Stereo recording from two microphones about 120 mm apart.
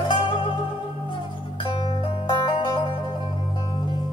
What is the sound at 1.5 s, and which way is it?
Music, 45° left (ahead or behind).